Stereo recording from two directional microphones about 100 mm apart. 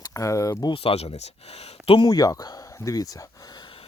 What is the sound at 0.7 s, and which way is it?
Speech, 85° left.